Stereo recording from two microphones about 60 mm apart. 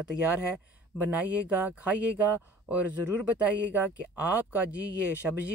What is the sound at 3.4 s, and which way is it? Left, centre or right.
Speech, right.